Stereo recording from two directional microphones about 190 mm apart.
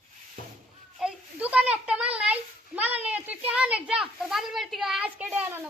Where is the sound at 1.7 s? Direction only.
5° right (ahead or behind).